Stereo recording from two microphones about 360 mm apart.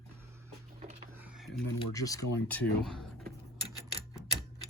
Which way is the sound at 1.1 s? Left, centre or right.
Centre.